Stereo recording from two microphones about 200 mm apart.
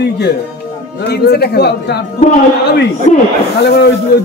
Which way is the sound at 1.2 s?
55° left (ahead or behind).